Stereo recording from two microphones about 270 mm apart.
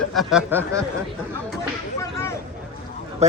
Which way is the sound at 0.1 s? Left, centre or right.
Centre.